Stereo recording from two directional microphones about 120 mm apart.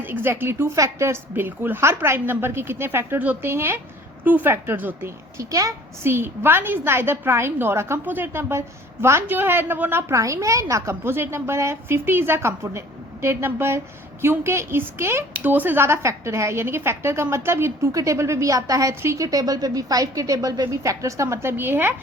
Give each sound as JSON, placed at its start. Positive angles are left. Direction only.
{"t": 0.0, "sound": "a woman's voice", "side_deg": -15}